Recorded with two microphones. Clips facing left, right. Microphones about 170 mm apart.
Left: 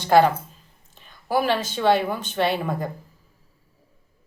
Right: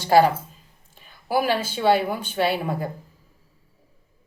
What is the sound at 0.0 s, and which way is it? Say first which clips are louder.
Speech: even; 10° right (ahead or behind).